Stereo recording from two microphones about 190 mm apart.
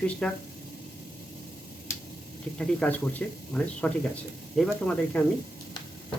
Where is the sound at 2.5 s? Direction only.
5° left (ahead or behind).